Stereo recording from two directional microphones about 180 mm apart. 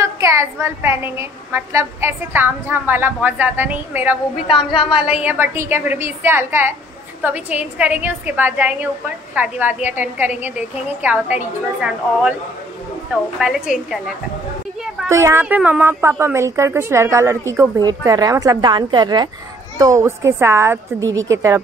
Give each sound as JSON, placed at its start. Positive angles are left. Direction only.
{"t": 0.0, "sound": "a woman's voice", "side_deg": -15}
{"t": 15.0, "sound": "a woman's voice", "side_deg": -15}